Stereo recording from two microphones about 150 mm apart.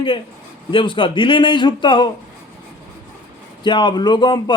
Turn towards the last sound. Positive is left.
turn(degrees=30)  # may be behind; listen again after turning